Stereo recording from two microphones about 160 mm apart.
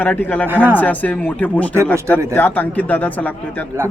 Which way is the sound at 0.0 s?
10° left (ahead or behind).